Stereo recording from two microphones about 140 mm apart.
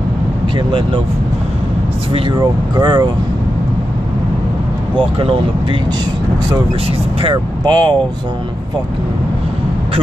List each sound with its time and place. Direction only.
2.1 s speech: 30° right (ahead or behind)
4.9 s speech: 35° right (ahead or behind)
7.2 s speech: 35° right (ahead or behind)